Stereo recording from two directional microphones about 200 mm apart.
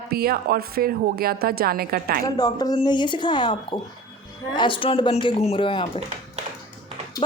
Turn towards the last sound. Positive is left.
turn(degrees=25)  # may be behind; listen again after turning